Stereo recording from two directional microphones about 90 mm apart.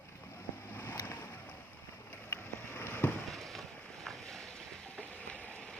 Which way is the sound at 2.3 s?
25° left (ahead or behind).